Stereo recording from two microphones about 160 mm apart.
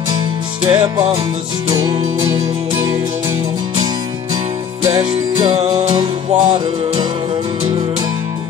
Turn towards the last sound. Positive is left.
turn(degrees=-30)  # may be behind; listen again after turning